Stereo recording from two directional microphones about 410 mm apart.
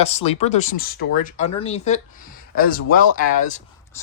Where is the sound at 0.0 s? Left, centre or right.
Centre.